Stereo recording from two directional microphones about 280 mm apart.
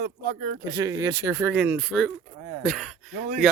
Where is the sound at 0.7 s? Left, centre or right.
Centre.